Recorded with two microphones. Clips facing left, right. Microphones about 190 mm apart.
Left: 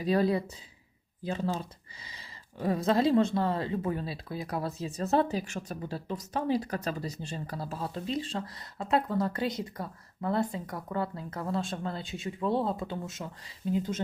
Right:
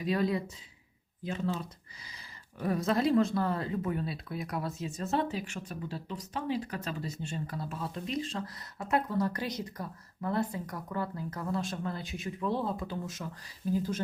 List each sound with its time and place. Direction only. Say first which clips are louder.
0.0 s speech: left 3 dB; 35° left (ahead or behind)